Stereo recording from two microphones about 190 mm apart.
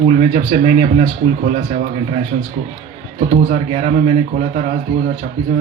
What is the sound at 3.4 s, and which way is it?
Speech, 40° right (ahead or behind).